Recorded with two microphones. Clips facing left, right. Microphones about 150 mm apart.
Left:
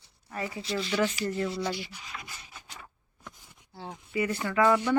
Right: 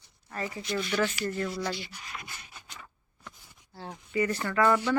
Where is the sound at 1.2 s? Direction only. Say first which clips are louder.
Left 1 dB; 15° left (ahead or behind).